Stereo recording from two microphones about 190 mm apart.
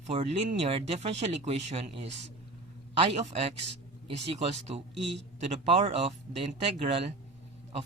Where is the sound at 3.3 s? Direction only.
35° right (ahead or behind).